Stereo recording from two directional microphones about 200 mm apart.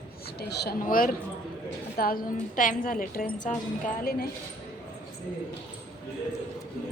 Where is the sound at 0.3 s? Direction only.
55° left (ahead or behind); by 3.6 s 40° left (ahead or behind).